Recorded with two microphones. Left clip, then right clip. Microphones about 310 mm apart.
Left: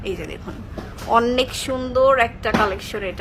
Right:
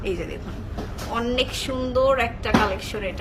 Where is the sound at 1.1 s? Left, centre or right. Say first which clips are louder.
Left 7 dB; centre.